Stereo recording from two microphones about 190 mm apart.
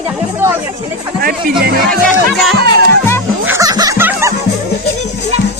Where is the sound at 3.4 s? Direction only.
15° right (ahead or behind).